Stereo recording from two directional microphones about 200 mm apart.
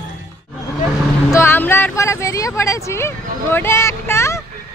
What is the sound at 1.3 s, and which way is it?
Speech, 10° left (ahead or behind).